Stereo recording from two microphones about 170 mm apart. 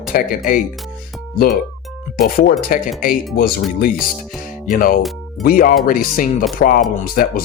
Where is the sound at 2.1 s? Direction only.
60° left (ahead or behind).